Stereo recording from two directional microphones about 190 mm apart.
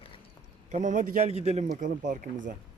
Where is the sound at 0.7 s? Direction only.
40° right (ahead or behind).